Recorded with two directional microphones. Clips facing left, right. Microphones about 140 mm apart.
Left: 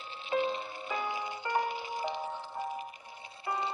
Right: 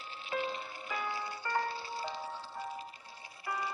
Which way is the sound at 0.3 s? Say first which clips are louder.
Left 6 dB; 20° left (ahead or behind).